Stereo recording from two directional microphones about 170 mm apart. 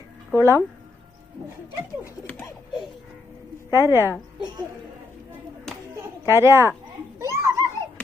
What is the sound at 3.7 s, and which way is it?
Speech, 15° right (ahead or behind).